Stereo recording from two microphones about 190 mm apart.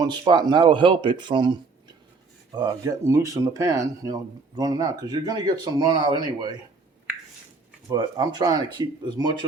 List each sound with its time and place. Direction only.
0.0 s speech: 20° right (ahead or behind)
7.9 s speech: 20° right (ahead or behind)